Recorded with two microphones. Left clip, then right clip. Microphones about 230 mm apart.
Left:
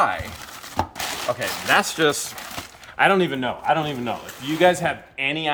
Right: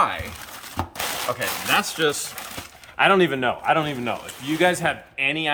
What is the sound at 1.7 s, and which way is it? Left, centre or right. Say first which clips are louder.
Speech: left 3 dB; centre.